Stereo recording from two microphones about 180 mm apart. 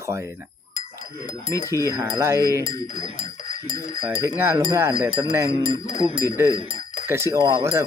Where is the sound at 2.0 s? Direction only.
15° right (ahead or behind).